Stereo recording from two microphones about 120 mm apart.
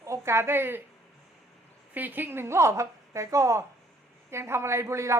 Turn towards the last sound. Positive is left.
turn(degrees=-25)  # may be behind; listen again after turning